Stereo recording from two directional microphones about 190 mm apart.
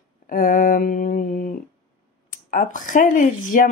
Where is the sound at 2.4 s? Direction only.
45° left (ahead or behind).